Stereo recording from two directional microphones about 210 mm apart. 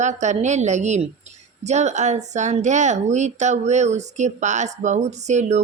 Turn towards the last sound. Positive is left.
turn(degrees=-35)  # may be behind; listen again after turning